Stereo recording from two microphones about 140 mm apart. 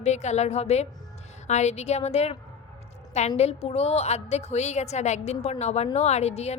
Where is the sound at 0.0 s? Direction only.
55° left (ahead or behind).